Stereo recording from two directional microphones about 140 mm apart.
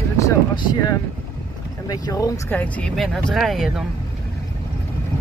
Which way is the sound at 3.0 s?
Centre (ahead or behind).